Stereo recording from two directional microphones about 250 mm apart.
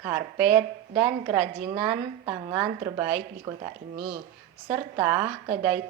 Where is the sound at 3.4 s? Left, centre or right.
Right.